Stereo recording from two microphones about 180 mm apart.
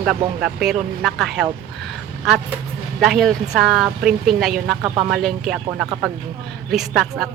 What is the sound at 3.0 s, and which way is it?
Speech, centre (ahead or behind).